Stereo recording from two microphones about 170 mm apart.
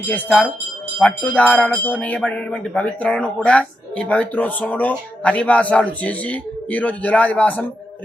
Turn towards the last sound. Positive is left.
turn(degrees=10)  # may be behind; listen again after turning